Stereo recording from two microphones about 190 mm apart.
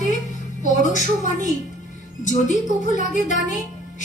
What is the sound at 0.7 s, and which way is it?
A woman's voice, 40° left (ahead or behind).